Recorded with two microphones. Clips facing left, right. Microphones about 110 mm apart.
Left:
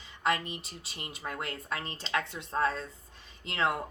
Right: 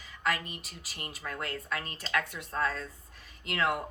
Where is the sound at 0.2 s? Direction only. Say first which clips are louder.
Left 2 dB; 25° left (ahead or behind).